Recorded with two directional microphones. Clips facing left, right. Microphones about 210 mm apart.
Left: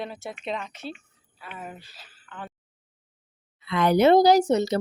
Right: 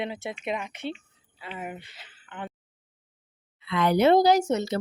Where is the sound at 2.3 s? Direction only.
20° right (ahead or behind).